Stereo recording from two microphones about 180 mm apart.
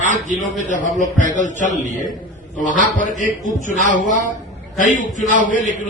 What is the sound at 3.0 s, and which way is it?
A man's voice, 45° left (ahead or behind).